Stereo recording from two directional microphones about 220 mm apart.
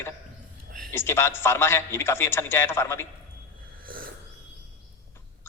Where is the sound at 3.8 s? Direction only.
40° right (ahead or behind).